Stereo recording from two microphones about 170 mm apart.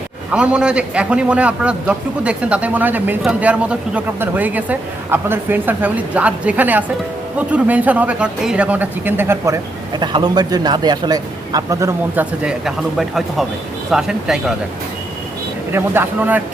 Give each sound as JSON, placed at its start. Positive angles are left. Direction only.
{"t": 0.3, "sound": "a man's voice", "side_deg": -5}
{"t": 9.9, "sound": "speech", "side_deg": -25}
{"t": 15.7, "sound": "a man's voice", "side_deg": -10}